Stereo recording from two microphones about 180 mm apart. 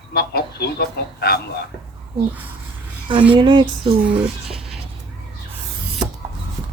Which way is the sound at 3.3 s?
25° right (ahead or behind).